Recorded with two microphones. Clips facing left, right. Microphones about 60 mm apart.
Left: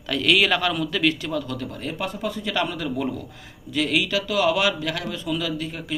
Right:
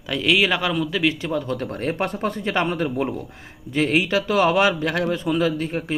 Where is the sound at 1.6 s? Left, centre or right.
Right.